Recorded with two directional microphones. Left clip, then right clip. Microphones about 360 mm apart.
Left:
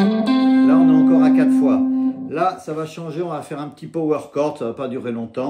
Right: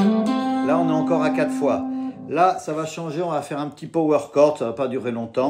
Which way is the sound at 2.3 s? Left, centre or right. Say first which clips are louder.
Right 5 dB; centre.